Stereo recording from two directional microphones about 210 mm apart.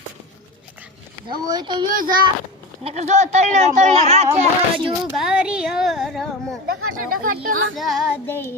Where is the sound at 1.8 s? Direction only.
40° right (ahead or behind).